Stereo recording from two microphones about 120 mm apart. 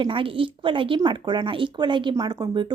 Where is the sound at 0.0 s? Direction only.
45° right (ahead or behind).